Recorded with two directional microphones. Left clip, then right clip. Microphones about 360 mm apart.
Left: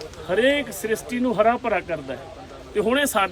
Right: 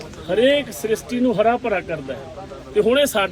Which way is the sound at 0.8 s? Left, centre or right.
Centre.